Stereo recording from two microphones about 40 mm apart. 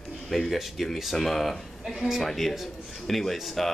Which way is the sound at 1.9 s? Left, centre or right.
Centre.